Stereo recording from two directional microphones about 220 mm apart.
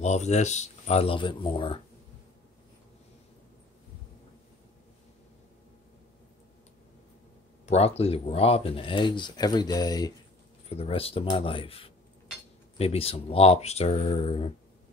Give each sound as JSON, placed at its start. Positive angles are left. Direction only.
{"t": 0.0, "sound": "speech", "side_deg": 30}
{"t": 7.6, "sound": "speech", "side_deg": 30}